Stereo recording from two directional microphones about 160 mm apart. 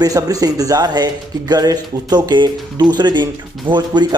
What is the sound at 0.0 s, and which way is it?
Speech, 20° right (ahead or behind).